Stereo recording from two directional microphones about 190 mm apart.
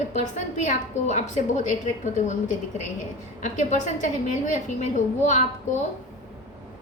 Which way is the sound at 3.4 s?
40° left (ahead or behind).